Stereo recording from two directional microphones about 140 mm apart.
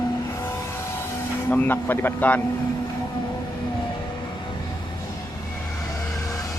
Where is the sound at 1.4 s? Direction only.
15° left (ahead or behind).